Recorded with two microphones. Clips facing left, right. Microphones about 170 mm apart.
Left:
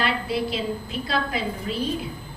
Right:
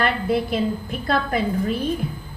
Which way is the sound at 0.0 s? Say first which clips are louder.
Right 4 dB; 50° right (ahead or behind).